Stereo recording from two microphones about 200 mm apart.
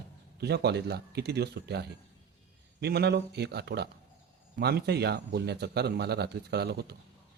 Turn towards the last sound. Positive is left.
turn(degrees=-55)  # may be behind; listen again after turning